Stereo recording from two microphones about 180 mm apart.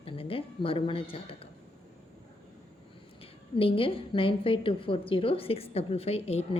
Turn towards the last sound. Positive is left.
turn(degrees=35)  # may be behind; listen again after turning